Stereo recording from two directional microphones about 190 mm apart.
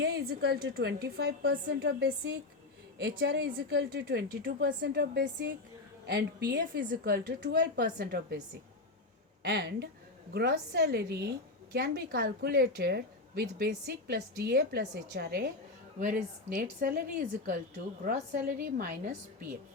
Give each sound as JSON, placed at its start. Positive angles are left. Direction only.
{"t": 0.3, "sound": "a woman's voice", "side_deg": -55}
{"t": 9.4, "sound": "a woman's voice", "side_deg": -60}